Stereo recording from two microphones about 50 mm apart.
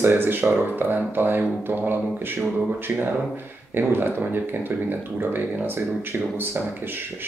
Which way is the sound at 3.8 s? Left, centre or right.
Right.